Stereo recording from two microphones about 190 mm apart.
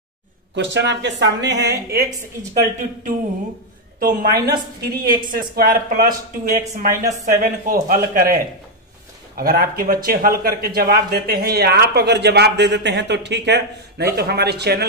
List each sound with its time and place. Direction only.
0.6 s a man's voice: 70° right (ahead or behind)
4.0 s speech: 50° right (ahead or behind)
9.4 s a man's voice: 50° right (ahead or behind)